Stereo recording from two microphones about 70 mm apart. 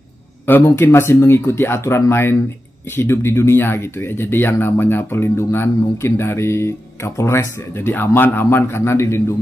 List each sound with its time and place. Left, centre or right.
0.5 s speech: left